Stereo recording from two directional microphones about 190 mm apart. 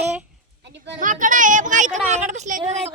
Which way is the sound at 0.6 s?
70° right (ahead or behind).